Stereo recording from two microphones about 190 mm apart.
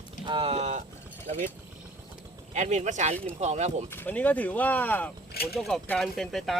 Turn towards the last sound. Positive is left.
turn(degrees=0)  # may be behind; listen again after turning